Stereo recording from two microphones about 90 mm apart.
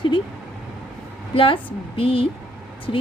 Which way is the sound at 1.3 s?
80° left.